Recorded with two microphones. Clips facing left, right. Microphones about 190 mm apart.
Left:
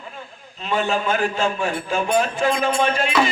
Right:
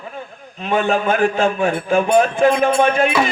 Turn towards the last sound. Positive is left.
turn(degrees=-55)  # may be behind; listen again after turning